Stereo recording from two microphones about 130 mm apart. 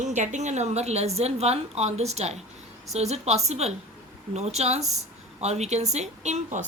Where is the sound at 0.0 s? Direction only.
65° right (ahead or behind).